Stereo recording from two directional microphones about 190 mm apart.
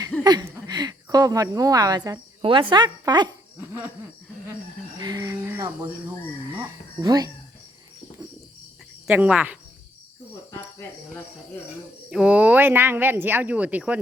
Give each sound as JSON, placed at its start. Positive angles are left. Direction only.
{"t": 0.3, "sound": "a woman's voice", "side_deg": -20}
{"t": 4.9, "sound": "a sound", "side_deg": -20}
{"t": 9.0, "sound": "speech", "side_deg": -5}
{"t": 12.1, "sound": "speech", "side_deg": -5}